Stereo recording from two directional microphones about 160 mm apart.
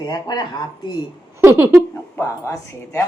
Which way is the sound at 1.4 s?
15° right (ahead or behind).